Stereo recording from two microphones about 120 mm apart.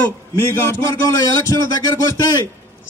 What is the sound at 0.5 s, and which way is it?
Speech, 25° left (ahead or behind).